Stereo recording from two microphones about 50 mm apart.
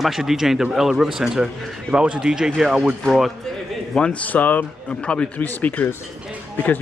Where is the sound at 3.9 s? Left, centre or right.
Centre.